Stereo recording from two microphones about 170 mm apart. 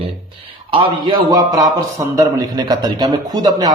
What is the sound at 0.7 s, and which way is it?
Speech, 25° right (ahead or behind).